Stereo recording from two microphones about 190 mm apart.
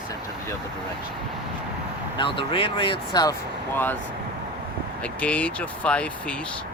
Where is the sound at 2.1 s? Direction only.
25° left (ahead or behind).